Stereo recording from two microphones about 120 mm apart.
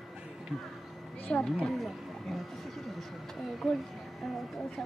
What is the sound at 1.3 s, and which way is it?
Speech, 10° left (ahead or behind).